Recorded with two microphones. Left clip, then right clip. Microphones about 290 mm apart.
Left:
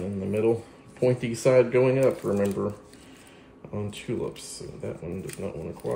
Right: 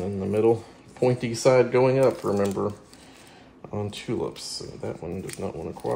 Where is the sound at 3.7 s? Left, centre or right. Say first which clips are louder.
Right 2 dB; right.